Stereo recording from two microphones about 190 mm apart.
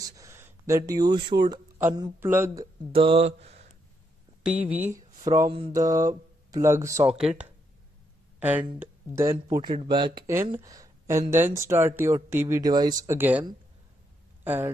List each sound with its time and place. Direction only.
0.2 s speech: 15° right (ahead or behind)
1.8 s speech: 10° right (ahead or behind)
2.9 s mantra: 30° right (ahead or behind)
4.4 s speech: 5° right (ahead or behind)
5.2 s a sound: 15° right (ahead or behind)
5.5 s mantra: 30° right (ahead or behind)
5.8 s speech: 20° right (ahead or behind)
7.2 s speech: 5° right (ahead or behind)